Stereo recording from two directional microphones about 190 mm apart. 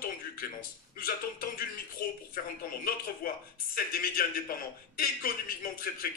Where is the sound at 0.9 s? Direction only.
50° left (ahead or behind).